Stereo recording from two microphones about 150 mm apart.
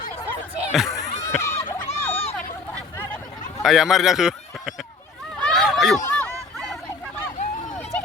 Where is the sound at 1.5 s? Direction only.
55° left (ahead or behind).